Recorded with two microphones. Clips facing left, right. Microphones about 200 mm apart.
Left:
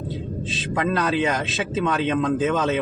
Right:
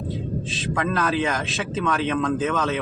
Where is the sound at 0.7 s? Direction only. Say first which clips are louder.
Left 1 dB; 15° left (ahead or behind).